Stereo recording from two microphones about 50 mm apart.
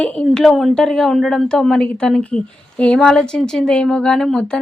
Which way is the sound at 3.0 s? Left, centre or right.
Centre.